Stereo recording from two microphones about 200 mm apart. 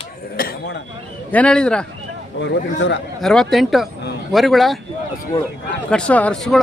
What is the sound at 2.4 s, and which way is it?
Speech, 65° left (ahead or behind).